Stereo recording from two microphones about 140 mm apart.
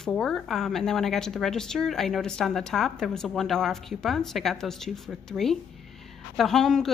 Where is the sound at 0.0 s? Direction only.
5° left (ahead or behind).